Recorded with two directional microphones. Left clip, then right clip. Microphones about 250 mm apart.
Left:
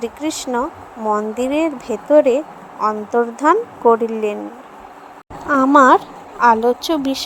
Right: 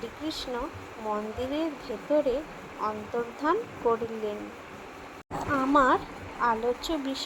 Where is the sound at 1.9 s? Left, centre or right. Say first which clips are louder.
Left 13 dB; left.